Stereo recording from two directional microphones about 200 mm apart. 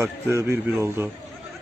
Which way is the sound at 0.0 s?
15° right (ahead or behind).